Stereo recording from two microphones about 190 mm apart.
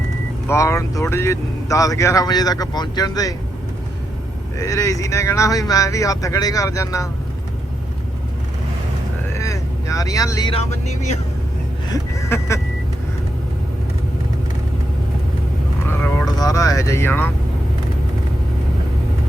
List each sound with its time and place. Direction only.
0.4 s speech: 15° left (ahead or behind)
4.5 s speech: 15° left (ahead or behind)
9.4 s vehicle: 15° left (ahead or behind)
10.5 s speech: 35° left (ahead or behind)
11.9 s speech: 15° left (ahead or behind)
15.9 s speech: 15° left (ahead or behind)